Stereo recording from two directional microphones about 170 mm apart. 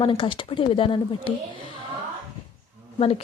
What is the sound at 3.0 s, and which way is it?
Speech, 35° left (ahead or behind).